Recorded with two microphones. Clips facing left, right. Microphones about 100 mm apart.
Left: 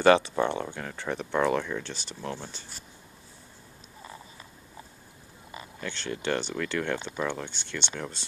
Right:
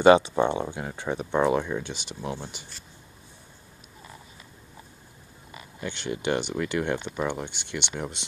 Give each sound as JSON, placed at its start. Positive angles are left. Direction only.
{"t": 0.0, "sound": "speech", "side_deg": -20}
{"t": 5.8, "sound": "speech", "side_deg": -15}